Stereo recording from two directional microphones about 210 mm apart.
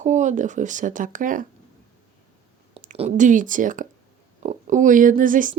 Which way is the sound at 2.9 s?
35° right (ahead or behind).